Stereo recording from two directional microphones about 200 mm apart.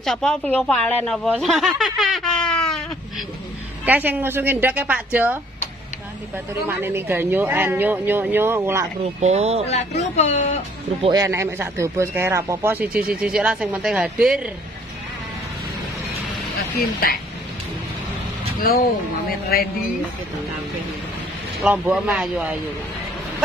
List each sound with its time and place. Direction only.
0.0 s a woman's voice: 5° left (ahead or behind)
3.8 s speech: 10° right (ahead or behind)
6.8 s speech: 10° right (ahead or behind)
9.2 s speech: 35° right (ahead or behind)
9.7 s speech: 35° left (ahead or behind)
11.0 s speech: 20° right (ahead or behind); by 14.5 s 5° right (ahead or behind)
18.6 s speech: 45° left (ahead or behind)
21.6 s speech: 5° right (ahead or behind)